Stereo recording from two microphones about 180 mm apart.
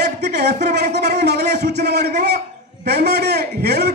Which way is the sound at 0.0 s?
65° right (ahead or behind).